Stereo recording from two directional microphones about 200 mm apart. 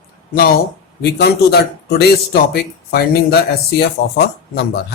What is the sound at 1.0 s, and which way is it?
Speech, 55° left (ahead or behind).